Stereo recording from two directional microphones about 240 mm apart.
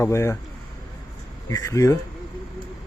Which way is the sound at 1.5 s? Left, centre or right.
Centre.